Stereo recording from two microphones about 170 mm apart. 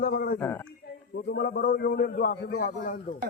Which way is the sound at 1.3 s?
65° left (ahead or behind).